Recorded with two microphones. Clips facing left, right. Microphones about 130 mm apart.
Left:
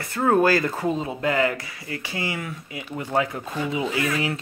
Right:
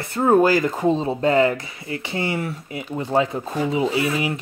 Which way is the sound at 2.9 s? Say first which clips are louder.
Right 4 dB; 25° right (ahead or behind).